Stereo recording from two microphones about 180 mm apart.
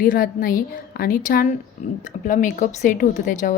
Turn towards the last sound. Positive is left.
turn(degrees=45)  # may be behind; listen again after turning